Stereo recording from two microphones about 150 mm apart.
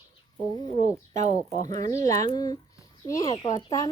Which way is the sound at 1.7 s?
25° left (ahead or behind).